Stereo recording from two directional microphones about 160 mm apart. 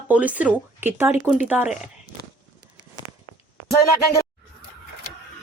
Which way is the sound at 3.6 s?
20° left (ahead or behind).